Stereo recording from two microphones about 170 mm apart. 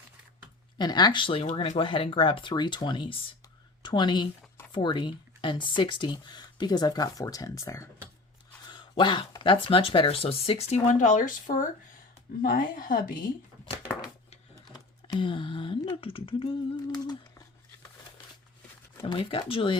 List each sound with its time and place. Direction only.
0.8 s a woman's voice: 25° left (ahead or behind); by 13.1 s 55° left (ahead or behind)
14.7 s speech: 25° left (ahead or behind)
19.0 s speech: 30° left (ahead or behind)